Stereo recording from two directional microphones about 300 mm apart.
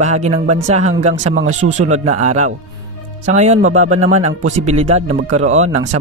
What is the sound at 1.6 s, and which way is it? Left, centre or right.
Speech, right.